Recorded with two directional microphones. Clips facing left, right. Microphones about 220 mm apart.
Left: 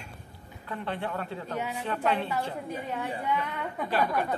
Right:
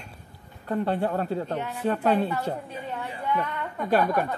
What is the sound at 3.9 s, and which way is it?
Speech, 50° right (ahead or behind).